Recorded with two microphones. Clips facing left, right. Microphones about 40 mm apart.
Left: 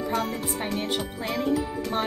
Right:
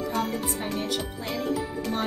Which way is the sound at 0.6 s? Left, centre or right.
Left.